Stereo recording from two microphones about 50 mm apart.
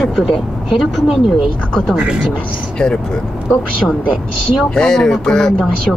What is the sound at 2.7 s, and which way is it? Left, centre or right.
Speech, centre.